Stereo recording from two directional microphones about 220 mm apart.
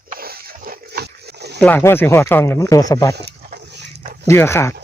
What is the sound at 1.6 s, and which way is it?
Speech, 10° left (ahead or behind).